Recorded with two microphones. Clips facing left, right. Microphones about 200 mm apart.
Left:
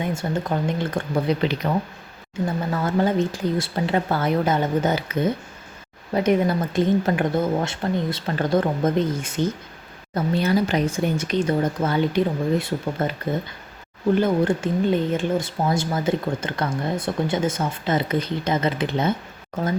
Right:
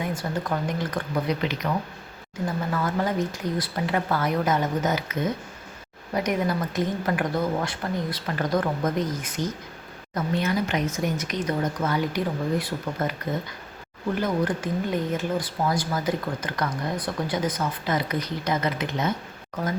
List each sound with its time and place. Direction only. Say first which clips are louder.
0.0 s speech: left 3 dB; 25° left (ahead or behind)
2.7 s speech: left 5 dB; 25° left (ahead or behind)
14.2 s speech: left 3 dB; 25° left (ahead or behind)